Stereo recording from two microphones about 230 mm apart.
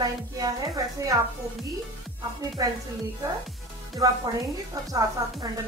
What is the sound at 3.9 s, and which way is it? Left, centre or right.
A woman's voice, centre.